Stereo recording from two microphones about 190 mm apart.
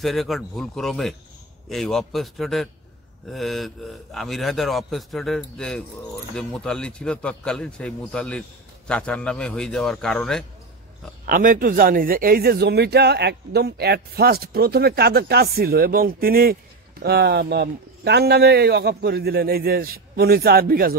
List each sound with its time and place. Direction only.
0.0 s a man's voice: centre (ahead or behind)
11.2 s a man's voice: 45° right (ahead or behind)